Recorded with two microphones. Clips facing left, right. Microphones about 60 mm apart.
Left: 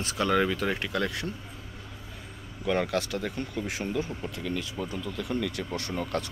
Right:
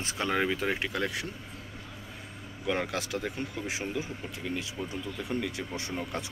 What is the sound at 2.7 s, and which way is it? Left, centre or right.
Speech, centre.